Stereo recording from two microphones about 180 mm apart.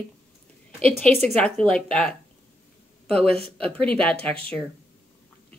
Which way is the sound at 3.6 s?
5° left (ahead or behind).